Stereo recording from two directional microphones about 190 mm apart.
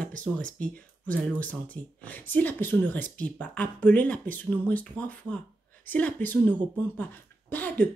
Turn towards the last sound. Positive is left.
turn(degrees=10)  # may be behind; listen again after turning